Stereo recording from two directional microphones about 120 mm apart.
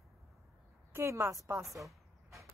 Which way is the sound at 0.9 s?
20° right (ahead or behind).